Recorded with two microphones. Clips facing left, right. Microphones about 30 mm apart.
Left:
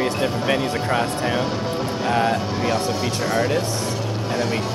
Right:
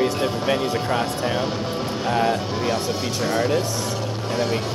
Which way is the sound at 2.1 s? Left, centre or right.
Centre.